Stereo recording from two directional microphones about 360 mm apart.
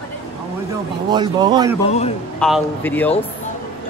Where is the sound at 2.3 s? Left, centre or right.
Centre.